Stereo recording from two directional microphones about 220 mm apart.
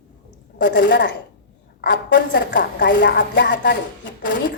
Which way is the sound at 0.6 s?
50° left (ahead or behind).